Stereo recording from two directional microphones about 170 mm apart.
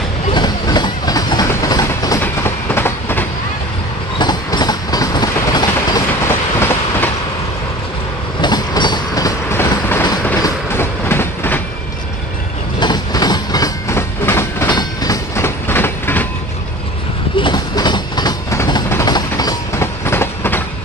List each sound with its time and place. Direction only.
0.3 s train: 25° left (ahead or behind)
4.2 s train: 25° left (ahead or behind)
8.4 s train: 25° left (ahead or behind)
12.8 s train: 25° left (ahead or behind)
17.4 s train: 25° left (ahead or behind)